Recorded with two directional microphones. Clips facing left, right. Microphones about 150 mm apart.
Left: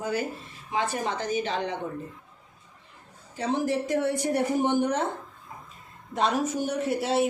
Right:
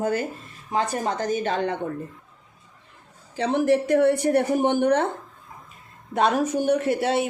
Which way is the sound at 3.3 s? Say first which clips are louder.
Right 6 dB; 65° right (ahead or behind).